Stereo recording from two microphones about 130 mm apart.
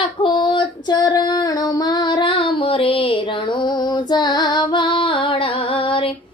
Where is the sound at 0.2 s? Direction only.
35° left (ahead or behind).